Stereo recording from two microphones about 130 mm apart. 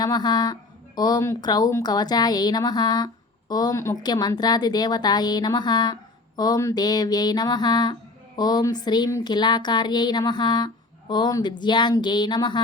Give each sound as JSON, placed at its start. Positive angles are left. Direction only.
{"t": 0.0, "sound": "a woman's voice", "side_deg": 30}